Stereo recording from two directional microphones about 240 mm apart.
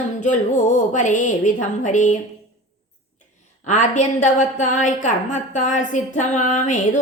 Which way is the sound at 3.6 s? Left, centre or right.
Left.